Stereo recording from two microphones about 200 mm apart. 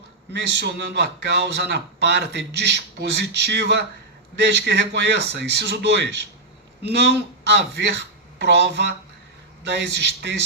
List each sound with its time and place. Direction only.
0.3 s a man's voice: 60° right (ahead or behind)